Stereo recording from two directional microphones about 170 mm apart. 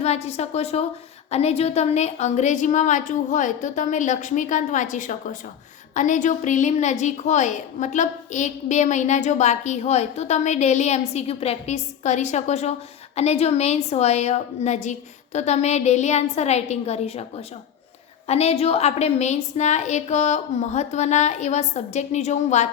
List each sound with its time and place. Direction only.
0.0 s a woman's voice: 40° left (ahead or behind)